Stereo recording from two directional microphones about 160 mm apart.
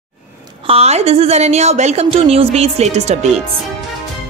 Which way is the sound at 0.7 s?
40° right (ahead or behind).